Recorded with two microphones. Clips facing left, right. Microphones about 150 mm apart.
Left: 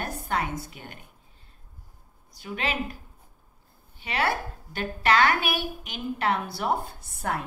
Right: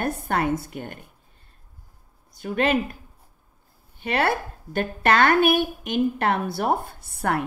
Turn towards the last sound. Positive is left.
turn(degrees=-65)  # may be behind; listen again after turning